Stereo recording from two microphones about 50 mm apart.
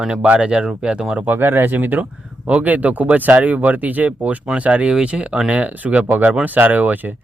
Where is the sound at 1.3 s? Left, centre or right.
Right.